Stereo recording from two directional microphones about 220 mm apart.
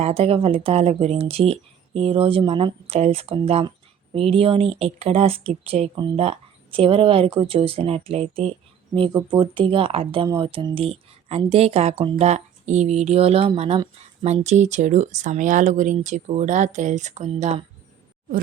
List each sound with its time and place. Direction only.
0.0 s speech: 25° right (ahead or behind)